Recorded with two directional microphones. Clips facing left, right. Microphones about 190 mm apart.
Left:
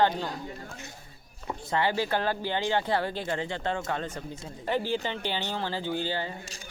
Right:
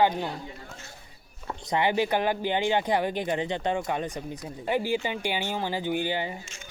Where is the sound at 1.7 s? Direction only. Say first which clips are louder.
Right 3 dB; 15° right (ahead or behind).